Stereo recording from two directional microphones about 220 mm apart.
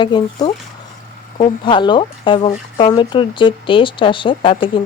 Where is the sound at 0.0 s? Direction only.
20° left (ahead or behind).